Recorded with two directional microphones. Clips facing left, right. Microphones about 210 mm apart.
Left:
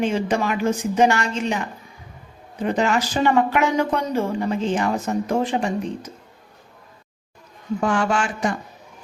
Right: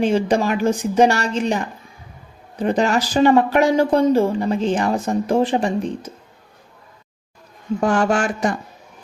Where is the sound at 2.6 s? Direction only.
35° right (ahead or behind).